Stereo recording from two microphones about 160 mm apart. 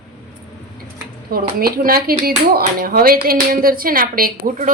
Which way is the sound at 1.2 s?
70° right (ahead or behind).